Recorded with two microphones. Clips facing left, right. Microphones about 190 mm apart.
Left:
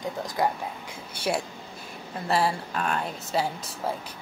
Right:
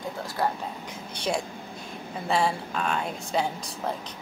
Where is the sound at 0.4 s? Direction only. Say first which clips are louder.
Left 1 dB; 15° left (ahead or behind).